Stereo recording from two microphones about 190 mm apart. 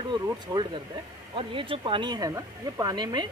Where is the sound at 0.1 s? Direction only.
25° right (ahead or behind).